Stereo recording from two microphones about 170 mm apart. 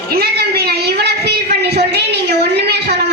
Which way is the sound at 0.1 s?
65° right (ahead or behind).